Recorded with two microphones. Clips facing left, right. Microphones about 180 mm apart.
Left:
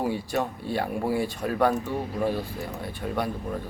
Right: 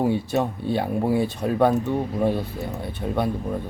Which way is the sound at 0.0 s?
25° right (ahead or behind).